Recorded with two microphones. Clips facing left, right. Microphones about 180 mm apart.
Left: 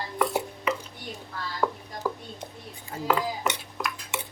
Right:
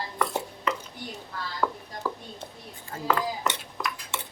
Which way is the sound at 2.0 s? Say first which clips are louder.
Left 2 dB; 10° left (ahead or behind).